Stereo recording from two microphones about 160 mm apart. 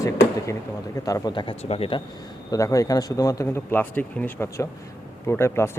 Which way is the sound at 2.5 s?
20° left (ahead or behind).